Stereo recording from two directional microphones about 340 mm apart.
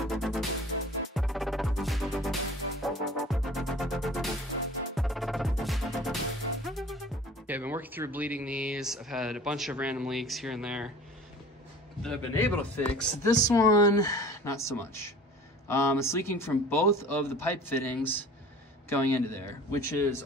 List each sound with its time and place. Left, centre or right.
0.0 s music: centre
7.4 s speech: centre
12.0 s speech: centre